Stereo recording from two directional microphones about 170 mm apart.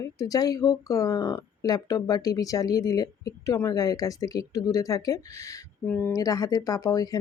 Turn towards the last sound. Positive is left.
turn(degrees=20)  # may be behind; listen again after turning